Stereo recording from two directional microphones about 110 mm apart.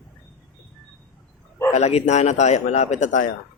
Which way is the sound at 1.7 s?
85° left.